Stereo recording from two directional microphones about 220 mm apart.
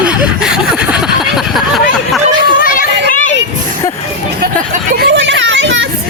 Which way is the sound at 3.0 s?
35° left (ahead or behind).